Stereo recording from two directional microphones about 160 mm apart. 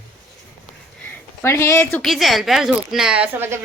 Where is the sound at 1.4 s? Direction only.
15° left (ahead or behind).